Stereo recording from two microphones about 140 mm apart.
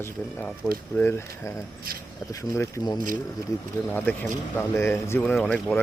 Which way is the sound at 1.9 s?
90° right.